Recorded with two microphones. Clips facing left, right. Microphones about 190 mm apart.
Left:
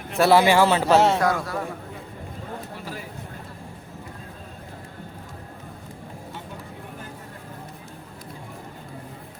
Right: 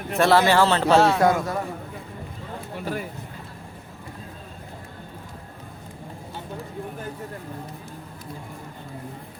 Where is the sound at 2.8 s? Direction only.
55° right (ahead or behind).